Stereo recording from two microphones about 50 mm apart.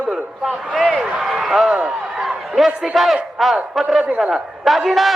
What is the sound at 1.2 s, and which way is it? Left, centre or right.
Speech, centre.